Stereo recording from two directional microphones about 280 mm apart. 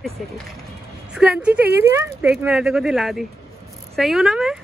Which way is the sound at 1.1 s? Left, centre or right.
Centre.